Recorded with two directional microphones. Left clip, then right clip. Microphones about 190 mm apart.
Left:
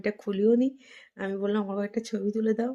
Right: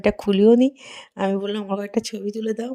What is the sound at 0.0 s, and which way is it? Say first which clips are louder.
Speech: right 9 dB; 45° right (ahead or behind).